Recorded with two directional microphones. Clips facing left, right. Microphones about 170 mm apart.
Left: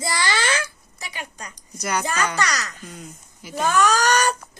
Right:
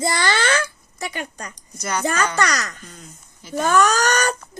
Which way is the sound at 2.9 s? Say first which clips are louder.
Left 4 dB; 10° left (ahead or behind).